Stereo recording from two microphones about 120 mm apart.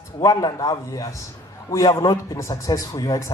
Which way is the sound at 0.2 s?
30° left (ahead or behind).